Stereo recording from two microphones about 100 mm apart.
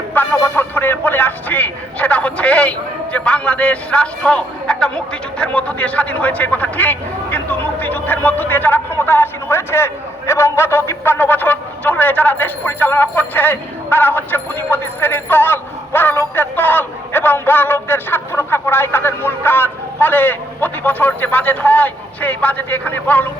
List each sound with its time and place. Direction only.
0.1 s speech: 20° left (ahead or behind)